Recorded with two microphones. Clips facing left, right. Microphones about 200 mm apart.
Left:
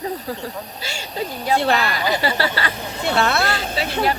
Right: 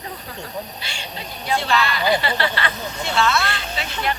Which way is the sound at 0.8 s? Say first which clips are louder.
Left 7 dB; 40° left (ahead or behind).